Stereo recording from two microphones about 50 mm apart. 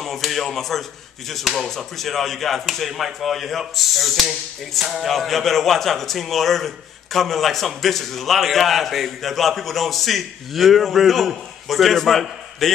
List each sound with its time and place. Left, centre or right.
0.0 s speech: centre